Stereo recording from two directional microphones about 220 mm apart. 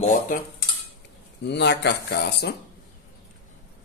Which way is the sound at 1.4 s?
50° left (ahead or behind).